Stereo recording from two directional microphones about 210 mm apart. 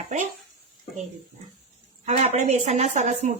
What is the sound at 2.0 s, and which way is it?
Speech, 30° right (ahead or behind).